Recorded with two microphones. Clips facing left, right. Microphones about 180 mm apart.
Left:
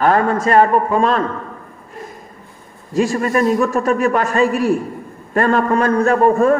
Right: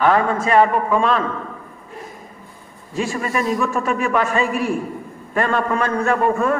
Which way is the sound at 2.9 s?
40° left (ahead or behind).